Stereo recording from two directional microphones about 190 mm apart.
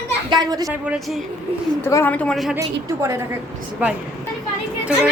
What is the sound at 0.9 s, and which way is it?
Speech, centre (ahead or behind).